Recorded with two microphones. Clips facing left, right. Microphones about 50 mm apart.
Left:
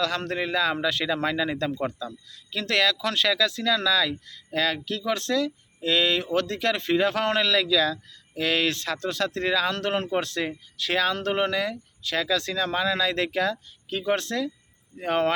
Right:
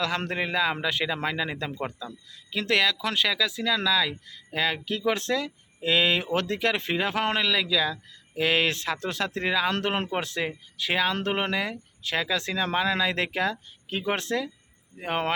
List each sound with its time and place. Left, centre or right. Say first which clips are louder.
0.2 s a man's voice: left 1 dB; right